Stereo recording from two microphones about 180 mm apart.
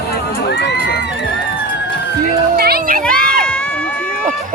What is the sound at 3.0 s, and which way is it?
Crowd, 5° left (ahead or behind).